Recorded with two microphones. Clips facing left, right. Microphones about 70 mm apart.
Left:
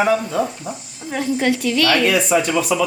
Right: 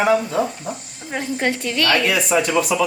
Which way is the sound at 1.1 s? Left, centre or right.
Right.